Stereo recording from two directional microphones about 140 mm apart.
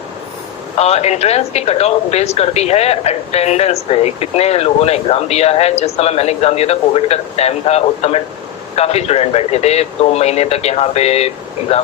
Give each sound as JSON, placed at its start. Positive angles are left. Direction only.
{"t": 0.8, "sound": "speech", "side_deg": 50}